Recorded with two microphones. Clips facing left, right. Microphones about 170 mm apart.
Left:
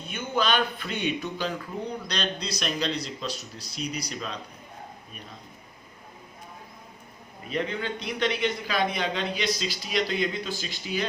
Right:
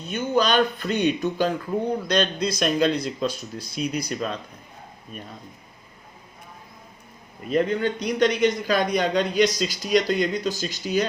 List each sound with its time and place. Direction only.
0.1 s a man's voice: 40° right (ahead or behind)
7.5 s a man's voice: 45° right (ahead or behind)